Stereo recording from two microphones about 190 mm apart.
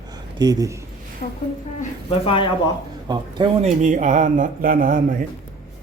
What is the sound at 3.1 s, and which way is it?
Speech, 25° right (ahead or behind).